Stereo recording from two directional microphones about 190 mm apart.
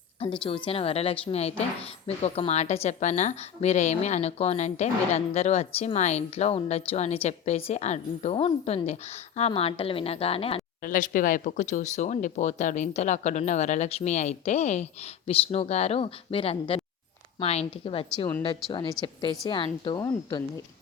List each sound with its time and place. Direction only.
0.4 s a woman's voice: 25° left (ahead or behind)
10.8 s a woman's voice: 45° left (ahead or behind); by 20.4 s 20° left (ahead or behind)